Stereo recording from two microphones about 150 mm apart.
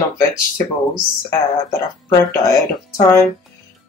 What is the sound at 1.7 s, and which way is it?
Speech, 20° left (ahead or behind).